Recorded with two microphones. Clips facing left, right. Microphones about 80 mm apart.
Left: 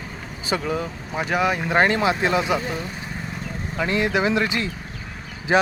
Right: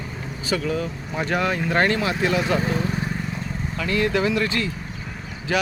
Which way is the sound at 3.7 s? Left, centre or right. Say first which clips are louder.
Left 1 dB; left.